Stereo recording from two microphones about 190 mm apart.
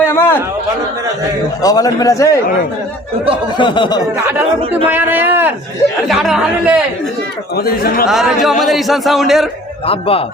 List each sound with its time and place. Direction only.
0.0 s a sound: 10° left (ahead or behind)
1.6 s a man's voice: 20° left (ahead or behind)
3.6 s speech: 25° left (ahead or behind)
4.9 s a man's voice: 10° right (ahead or behind)
7.5 s speech: 50° left (ahead or behind)
8.0 s speech: centre (ahead or behind)
9.8 s a man's voice: 30° left (ahead or behind)